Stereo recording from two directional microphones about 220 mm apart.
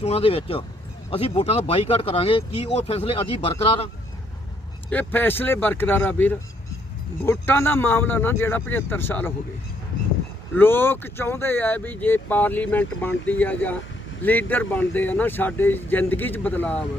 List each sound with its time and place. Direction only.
0.0 s speech: 25° left (ahead or behind)
4.9 s speech: 10° left (ahead or behind)
10.5 s speech: 10° left (ahead or behind)